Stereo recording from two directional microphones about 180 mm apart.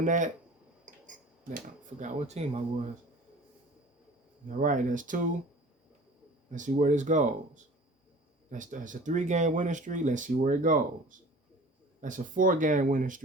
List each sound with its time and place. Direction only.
0.0 s speech: 45° right (ahead or behind)
4.4 s speech: 45° right (ahead or behind)
6.5 s speech: 45° right (ahead or behind)
12.0 s speech: 45° right (ahead or behind)